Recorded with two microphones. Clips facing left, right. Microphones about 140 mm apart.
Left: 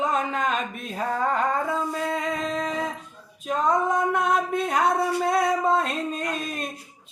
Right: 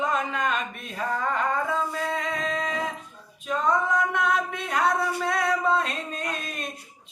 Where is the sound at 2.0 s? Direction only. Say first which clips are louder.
Left 2 dB; 40° left (ahead or behind).